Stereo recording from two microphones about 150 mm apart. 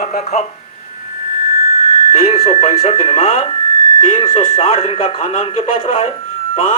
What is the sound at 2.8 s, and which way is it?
Speech, 40° left (ahead or behind).